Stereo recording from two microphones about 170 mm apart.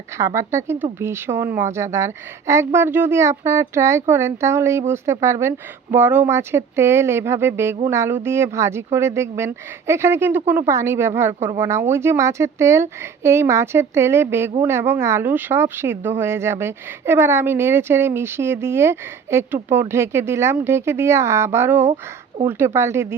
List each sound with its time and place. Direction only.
0.2 s speech: 15° right (ahead or behind)